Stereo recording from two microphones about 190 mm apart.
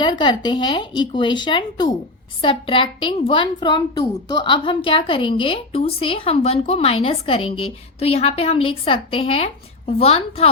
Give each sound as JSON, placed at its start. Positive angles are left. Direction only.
{"t": 0.0, "sound": "a woman's voice", "side_deg": 25}